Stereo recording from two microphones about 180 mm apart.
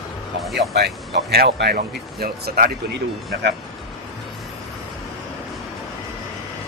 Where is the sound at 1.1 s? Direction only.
65° right (ahead or behind).